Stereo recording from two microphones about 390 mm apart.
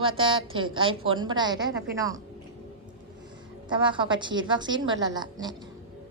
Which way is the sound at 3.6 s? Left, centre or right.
Centre.